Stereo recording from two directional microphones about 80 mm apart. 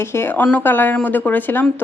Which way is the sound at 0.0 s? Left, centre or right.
Left.